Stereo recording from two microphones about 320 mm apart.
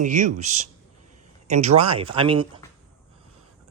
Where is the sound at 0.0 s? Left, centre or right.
Right.